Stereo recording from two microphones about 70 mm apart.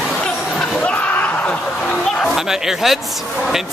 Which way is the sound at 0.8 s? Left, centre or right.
Left.